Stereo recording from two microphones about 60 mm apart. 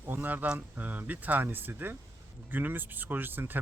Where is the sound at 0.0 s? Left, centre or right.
Right.